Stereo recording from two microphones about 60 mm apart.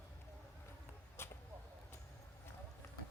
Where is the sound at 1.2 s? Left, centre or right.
Left.